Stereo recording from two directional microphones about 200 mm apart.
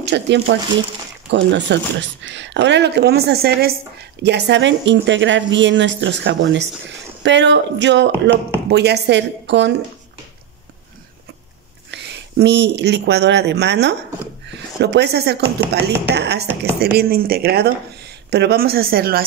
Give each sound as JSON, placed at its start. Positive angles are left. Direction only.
{"t": 0.0, "sound": "a woman's voice", "side_deg": -60}
{"t": 11.9, "sound": "a woman's voice", "side_deg": -60}